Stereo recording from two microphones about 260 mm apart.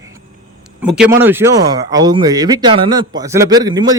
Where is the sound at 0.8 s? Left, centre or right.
Centre.